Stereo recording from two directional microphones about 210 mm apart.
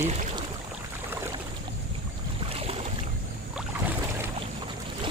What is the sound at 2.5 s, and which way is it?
Boat, 30° right (ahead or behind).